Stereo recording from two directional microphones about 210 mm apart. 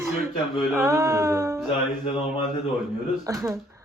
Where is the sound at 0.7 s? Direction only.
15° right (ahead or behind).